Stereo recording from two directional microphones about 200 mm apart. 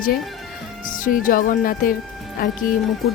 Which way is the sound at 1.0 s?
45° left (ahead or behind).